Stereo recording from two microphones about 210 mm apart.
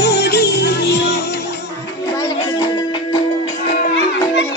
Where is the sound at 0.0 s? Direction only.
55° left (ahead or behind).